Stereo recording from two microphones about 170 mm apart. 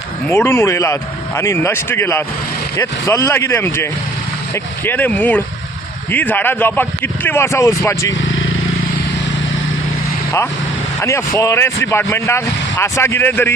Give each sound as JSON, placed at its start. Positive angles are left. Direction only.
{"t": 0.3, "sound": "speech", "side_deg": 15}
{"t": 11.0, "sound": "speech", "side_deg": 15}